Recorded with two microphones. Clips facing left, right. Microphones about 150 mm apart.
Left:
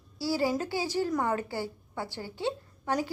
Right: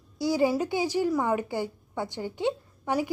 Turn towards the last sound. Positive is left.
turn(degrees=-15)  # may be behind; listen again after turning